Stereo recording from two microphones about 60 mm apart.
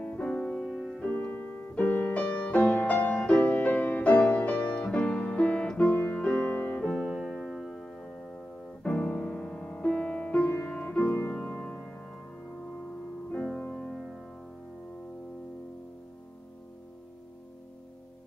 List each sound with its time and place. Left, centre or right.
0.0 s music: left
0.3 s music: centre
1.0 s music: left
6.9 s music: centre
13.4 s music: centre